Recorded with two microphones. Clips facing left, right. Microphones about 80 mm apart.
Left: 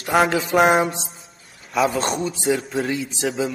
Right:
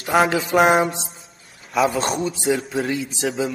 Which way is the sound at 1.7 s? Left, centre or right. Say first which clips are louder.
Right 1 dB; centre.